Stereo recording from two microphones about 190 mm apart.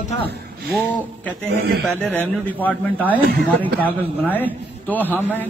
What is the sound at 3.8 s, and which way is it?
A man's voice, 10° left (ahead or behind).